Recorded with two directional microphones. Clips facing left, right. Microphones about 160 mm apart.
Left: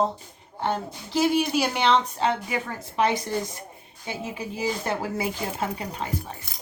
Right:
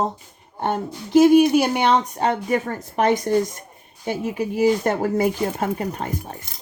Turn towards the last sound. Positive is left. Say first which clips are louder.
# right 5 dB
turn(degrees=-50)  # may be behind; listen again after turning